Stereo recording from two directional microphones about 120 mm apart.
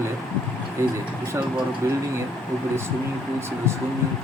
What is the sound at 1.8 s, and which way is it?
Speech, 25° right (ahead or behind).